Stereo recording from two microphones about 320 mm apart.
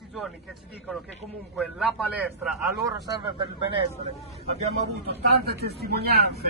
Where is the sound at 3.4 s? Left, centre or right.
Centre.